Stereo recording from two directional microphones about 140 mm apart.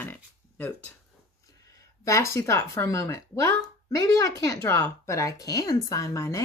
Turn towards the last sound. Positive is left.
turn(degrees=20)  # may be behind; listen again after turning